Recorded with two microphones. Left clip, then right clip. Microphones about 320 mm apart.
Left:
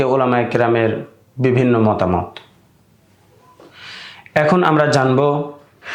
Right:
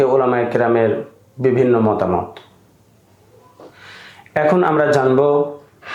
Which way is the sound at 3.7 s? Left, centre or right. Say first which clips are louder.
Left 7 dB; left.